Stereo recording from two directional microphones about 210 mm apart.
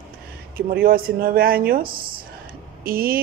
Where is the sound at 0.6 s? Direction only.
45° right (ahead or behind).